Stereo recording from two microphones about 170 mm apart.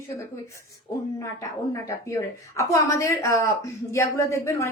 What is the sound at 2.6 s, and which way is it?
A woman's voice, 20° left (ahead or behind).